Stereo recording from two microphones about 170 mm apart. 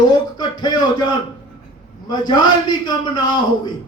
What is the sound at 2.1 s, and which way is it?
A man's voice, 25° left (ahead or behind).